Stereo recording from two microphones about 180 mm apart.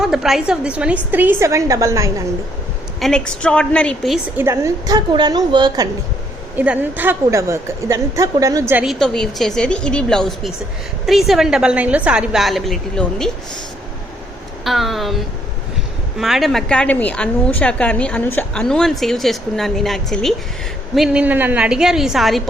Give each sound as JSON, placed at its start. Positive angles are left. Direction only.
{"t": 0.0, "sound": "a woman's voice", "side_deg": -5}
{"t": 3.0, "sound": "a woman's voice", "side_deg": 5}
{"t": 4.4, "sound": "a woman's voice", "side_deg": -15}
{"t": 6.6, "sound": "a woman's voice", "side_deg": -10}
{"t": 8.8, "sound": "a woman's voice", "side_deg": 0}
{"t": 14.6, "sound": "a woman's voice", "side_deg": 0}